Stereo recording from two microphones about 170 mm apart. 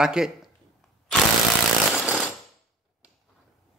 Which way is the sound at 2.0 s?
5° right (ahead or behind).